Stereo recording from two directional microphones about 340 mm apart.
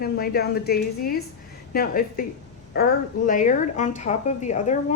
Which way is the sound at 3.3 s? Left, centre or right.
Left.